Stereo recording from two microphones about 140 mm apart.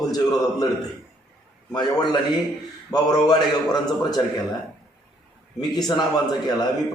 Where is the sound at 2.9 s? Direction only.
30° left (ahead or behind).